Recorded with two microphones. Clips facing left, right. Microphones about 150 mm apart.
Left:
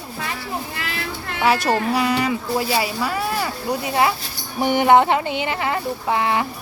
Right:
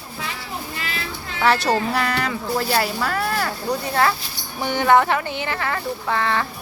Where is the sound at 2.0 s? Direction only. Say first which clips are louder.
Left 3 dB; 5° left (ahead or behind).